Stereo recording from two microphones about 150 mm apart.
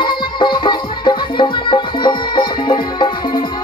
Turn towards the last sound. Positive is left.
turn(degrees=30)  # may be behind; listen again after turning